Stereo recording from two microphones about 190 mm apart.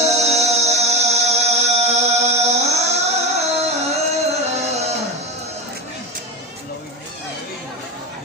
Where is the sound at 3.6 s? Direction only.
35° right (ahead or behind).